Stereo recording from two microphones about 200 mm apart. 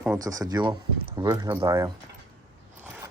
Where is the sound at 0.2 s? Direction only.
15° right (ahead or behind).